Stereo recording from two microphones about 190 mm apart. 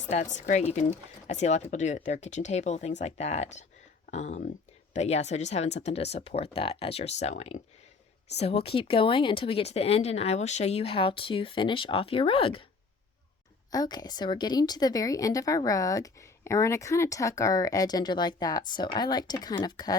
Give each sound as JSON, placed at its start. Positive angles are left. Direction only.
{"t": 0.1, "sound": "a woman's voice", "side_deg": 40}
{"t": 13.7, "sound": "a woman's voice", "side_deg": 20}